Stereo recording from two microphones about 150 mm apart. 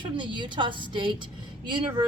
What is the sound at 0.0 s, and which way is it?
A woman's voice, 30° right (ahead or behind).